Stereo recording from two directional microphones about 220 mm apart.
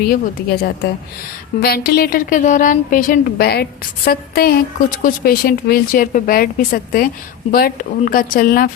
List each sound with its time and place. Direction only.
0.0 s a woman's voice: 45° left (ahead or behind)